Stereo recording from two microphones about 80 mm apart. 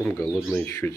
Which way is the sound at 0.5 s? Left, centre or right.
Left.